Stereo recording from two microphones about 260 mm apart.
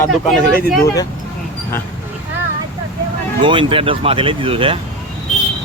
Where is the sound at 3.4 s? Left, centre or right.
Centre.